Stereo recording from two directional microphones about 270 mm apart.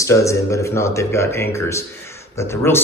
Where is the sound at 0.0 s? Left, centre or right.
Centre.